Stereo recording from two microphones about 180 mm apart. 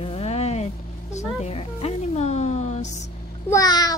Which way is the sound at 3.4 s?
20° left (ahead or behind).